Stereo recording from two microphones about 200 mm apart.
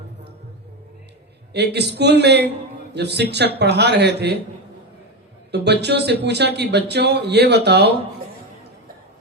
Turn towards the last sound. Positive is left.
turn(degrees=-55)  # may be behind; listen again after turning